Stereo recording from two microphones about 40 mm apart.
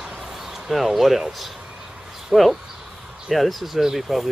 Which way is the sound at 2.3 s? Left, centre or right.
Right.